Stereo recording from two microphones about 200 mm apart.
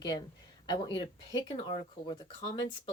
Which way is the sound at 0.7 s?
25° left (ahead or behind).